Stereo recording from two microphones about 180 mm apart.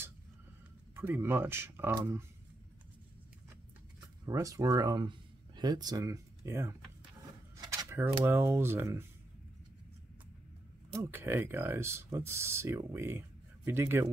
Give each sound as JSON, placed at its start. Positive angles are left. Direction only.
{"t": 0.9, "sound": "speech", "side_deg": -10}
{"t": 4.3, "sound": "speech", "side_deg": -20}
{"t": 10.9, "sound": "speech", "side_deg": -15}